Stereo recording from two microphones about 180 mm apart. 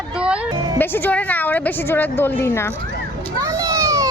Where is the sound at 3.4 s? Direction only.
20° right (ahead or behind).